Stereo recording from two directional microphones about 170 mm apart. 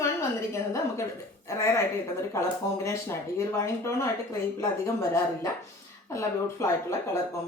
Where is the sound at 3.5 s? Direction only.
15° left (ahead or behind).